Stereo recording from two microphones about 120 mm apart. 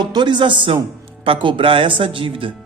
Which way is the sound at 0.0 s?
40° right (ahead or behind).